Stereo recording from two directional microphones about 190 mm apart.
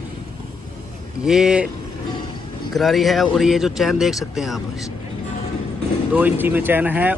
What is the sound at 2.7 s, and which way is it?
Speech, centre (ahead or behind).